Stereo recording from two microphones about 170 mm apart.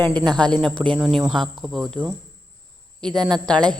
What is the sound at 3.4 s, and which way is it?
Speech, 5° left (ahead or behind).